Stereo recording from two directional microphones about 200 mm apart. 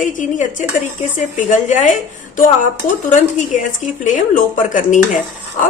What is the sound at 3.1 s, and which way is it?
A woman's voice, 40° left (ahead or behind).